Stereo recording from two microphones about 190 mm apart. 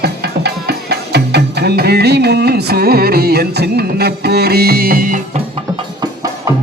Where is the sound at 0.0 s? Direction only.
60° right (ahead or behind).